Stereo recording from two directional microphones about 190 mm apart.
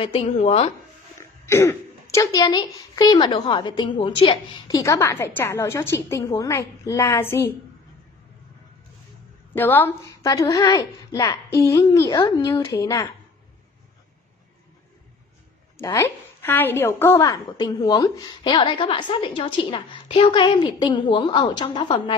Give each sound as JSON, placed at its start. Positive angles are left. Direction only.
{"t": 0.0, "sound": "speech", "side_deg": 30}
{"t": 1.4, "sound": "a woman's voice", "side_deg": 15}
{"t": 9.5, "sound": "a woman's voice", "side_deg": 10}
{"t": 15.8, "sound": "a woman's voice", "side_deg": 15}